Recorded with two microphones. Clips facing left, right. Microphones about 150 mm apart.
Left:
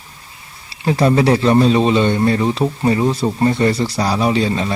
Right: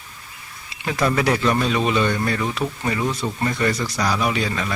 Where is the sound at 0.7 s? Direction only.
30° left (ahead or behind).